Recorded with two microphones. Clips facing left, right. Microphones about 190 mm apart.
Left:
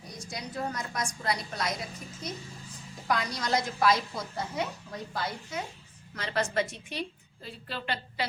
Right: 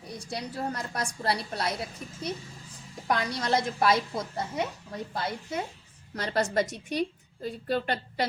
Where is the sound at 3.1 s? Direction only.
30° right (ahead or behind).